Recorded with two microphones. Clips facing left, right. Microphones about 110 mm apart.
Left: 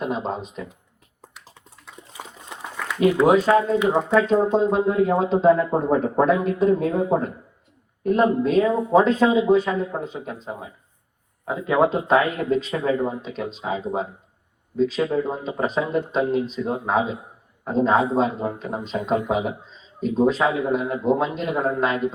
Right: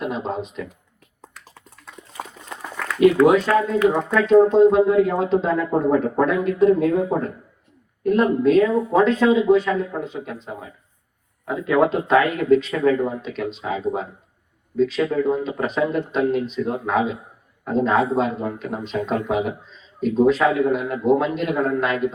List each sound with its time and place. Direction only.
0.0 s speech: 35° left (ahead or behind)
3.0 s speech: 30° left (ahead or behind)